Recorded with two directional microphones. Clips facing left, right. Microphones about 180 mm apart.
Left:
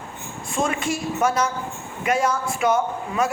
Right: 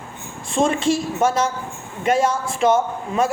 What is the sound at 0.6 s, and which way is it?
A woman's voice, 25° right (ahead or behind).